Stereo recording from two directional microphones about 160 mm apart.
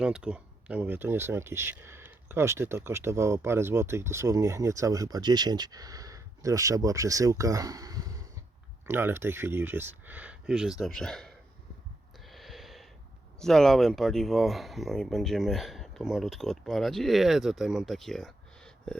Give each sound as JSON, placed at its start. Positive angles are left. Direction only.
{"t": 0.0, "sound": "speech", "side_deg": -5}
{"t": 12.3, "sound": "a sound", "side_deg": 0}
{"t": 13.4, "sound": "speech", "side_deg": 5}